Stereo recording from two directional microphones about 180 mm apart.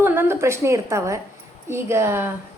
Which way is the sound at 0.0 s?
10° right (ahead or behind).